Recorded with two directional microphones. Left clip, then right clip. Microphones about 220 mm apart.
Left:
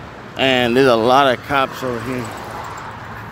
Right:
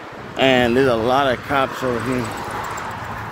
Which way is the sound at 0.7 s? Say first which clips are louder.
Left 4 dB; 25° left (ahead or behind).